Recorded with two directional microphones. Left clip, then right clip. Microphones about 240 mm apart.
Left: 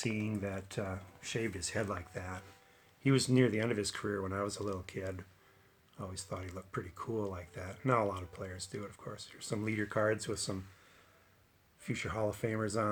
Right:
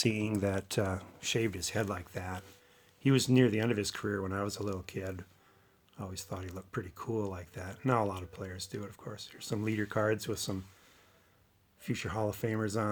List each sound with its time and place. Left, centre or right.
0.2 s speech: right
11.8 s speech: right